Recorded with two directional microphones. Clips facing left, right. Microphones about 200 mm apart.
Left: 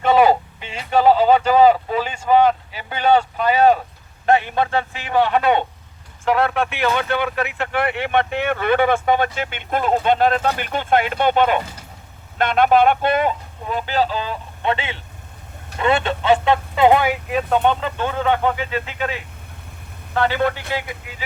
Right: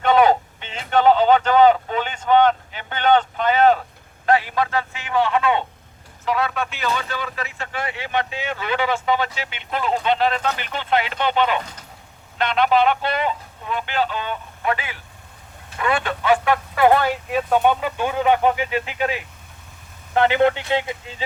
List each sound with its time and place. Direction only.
0.0 s a sound: 5° left (ahead or behind)
0.9 s speech: 5° left (ahead or behind)
4.3 s speech: 25° left (ahead or behind)
5.3 s speech: 60° left (ahead or behind); by 17.2 s 15° left (ahead or behind)
17.2 s speech: 5° right (ahead or behind); by 21.2 s 25° right (ahead or behind)